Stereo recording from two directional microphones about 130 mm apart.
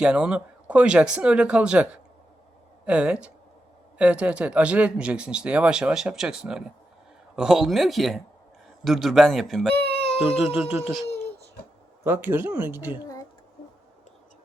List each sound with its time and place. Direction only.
0.0 s speech: 5° right (ahead or behind)
9.7 s a sound: 10° left (ahead or behind)
10.4 s speech: 5° right (ahead or behind)
11.1 s baby cry: 15° left (ahead or behind)
12.0 s speech: 15° right (ahead or behind)